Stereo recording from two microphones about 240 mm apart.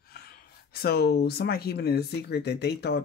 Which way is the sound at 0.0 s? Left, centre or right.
Left.